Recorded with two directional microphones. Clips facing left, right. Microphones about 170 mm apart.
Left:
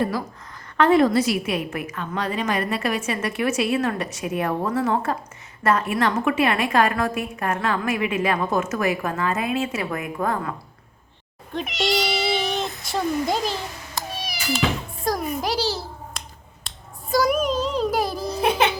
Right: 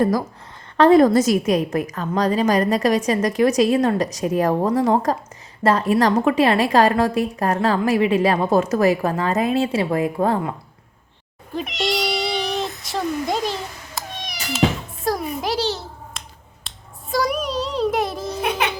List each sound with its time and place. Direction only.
0.8 s a woman's voice: 40° right (ahead or behind)
11.5 s cat: centre (ahead or behind)
15.1 s music: centre (ahead or behind)
15.4 s babbling: centre (ahead or behind)
16.6 s a sound: centre (ahead or behind)
18.3 s a sound: 30° left (ahead or behind)